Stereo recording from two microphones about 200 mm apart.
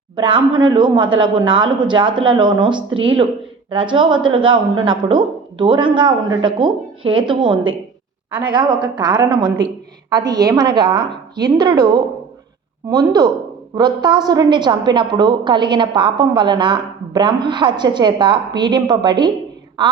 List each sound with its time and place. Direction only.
0.2 s a woman's voice: 25° right (ahead or behind)
8.3 s a woman's voice: 5° right (ahead or behind)
8.5 s a woman's voice: 20° right (ahead or behind)